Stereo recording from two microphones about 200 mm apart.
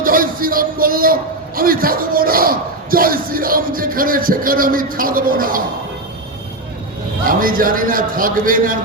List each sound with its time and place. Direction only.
0.0 s a man's voice: 45° right (ahead or behind)
7.3 s a man's voice: 45° right (ahead or behind)